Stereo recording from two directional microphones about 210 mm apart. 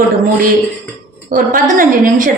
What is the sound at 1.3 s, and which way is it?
A woman's voice, 40° right (ahead or behind).